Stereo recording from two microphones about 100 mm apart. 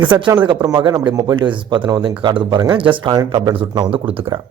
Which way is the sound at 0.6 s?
40° right (ahead or behind).